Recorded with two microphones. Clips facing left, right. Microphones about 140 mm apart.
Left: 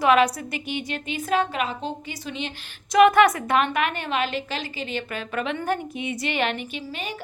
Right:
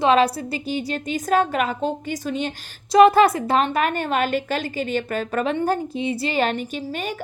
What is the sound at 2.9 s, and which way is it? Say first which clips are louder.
A woman's voice: right 3 dB; 30° right (ahead or behind).